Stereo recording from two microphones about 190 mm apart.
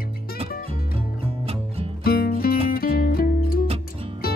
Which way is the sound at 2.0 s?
55° left (ahead or behind).